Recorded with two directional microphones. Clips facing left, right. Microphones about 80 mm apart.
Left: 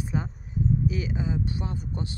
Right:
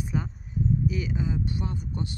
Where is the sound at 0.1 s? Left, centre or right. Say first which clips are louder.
Even; left.